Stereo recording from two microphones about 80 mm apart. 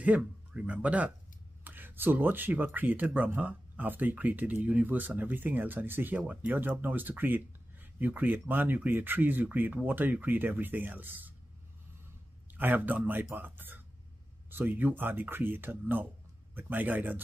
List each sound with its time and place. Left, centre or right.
0.0 s speech: centre
12.5 s speech: right